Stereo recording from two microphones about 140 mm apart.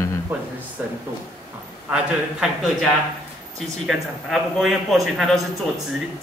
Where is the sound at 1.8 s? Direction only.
5° right (ahead or behind).